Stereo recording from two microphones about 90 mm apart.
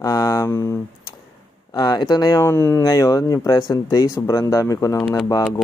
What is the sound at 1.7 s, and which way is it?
Speech, 50° left (ahead or behind).